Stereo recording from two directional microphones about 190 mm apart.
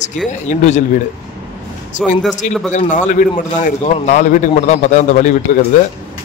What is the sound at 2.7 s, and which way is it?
A man's voice, 40° left (ahead or behind).